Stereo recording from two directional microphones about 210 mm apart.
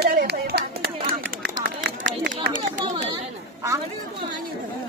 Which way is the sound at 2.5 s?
40° right (ahead or behind).